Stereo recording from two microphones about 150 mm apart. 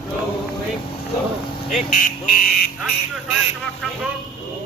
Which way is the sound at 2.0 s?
65° left (ahead or behind).